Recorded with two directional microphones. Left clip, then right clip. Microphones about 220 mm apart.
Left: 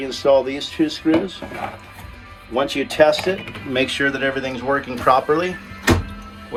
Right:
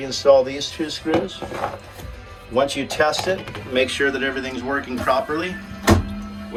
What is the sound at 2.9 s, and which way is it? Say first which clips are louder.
Speech: left 5 dB; 30° left (ahead or behind).